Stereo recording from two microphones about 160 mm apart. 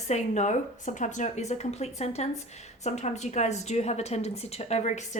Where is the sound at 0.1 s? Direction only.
45° left (ahead or behind).